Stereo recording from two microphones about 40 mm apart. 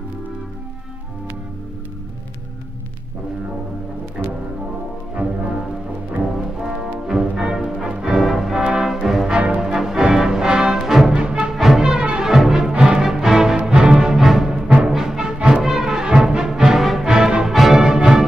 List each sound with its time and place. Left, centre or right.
5.2 s music: right
6.2 s music: centre
8.5 s music: right
9.0 s music: centre
10.8 s music: centre
11.1 s music: right
11.5 s music: centre
11.9 s music: right
12.3 s music: centre
14.1 s music: centre
17.0 s music: centre
17.5 s music: centre